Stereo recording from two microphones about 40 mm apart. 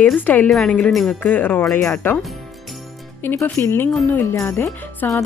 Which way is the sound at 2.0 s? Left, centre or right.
Left.